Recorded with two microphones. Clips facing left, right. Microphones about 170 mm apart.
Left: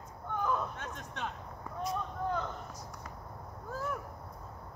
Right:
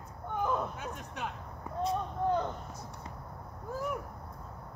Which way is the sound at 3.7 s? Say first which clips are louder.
Right 2 dB; 15° right (ahead or behind).